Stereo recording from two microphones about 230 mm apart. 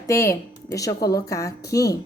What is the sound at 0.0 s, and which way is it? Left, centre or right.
A woman's voice, centre.